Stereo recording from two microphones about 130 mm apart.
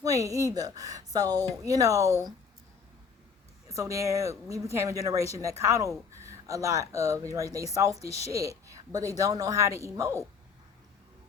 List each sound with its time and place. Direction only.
0.0 s speech: 25° right (ahead or behind)
3.7 s speech: 25° right (ahead or behind)